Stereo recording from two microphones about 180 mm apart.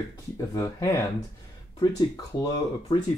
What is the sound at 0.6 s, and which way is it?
Speech, 15° left (ahead or behind).